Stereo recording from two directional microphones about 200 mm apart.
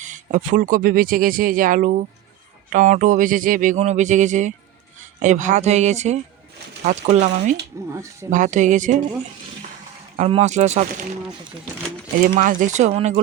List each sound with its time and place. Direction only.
0.0 s speech: 40° right (ahead or behind)
7.9 s speech: 15° right (ahead or behind)
8.3 s speech: 40° right (ahead or behind)
10.2 s speech: 30° right (ahead or behind)
12.2 s speech: 40° right (ahead or behind)